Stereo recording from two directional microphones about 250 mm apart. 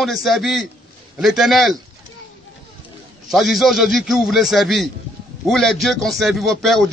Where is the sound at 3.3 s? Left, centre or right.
Centre.